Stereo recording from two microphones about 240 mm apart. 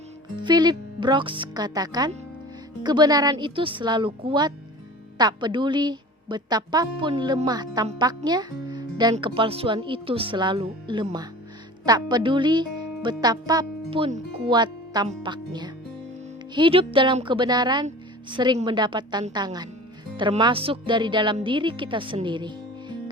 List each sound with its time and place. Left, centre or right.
0.3 s a woman's voice: centre